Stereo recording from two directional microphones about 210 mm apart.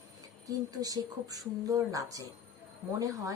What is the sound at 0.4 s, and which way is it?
A woman's voice, 15° right (ahead or behind).